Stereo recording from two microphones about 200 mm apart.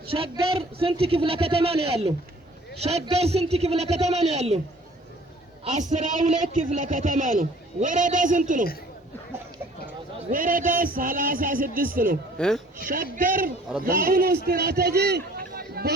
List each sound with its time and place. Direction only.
0.0 s a man's voice: 30° right (ahead or behind)
5.6 s a man's voice: 35° right (ahead or behind)
10.2 s speech: 45° right (ahead or behind)
12.4 s speech: 5° left (ahead or behind)
12.7 s a man's voice: 45° right (ahead or behind)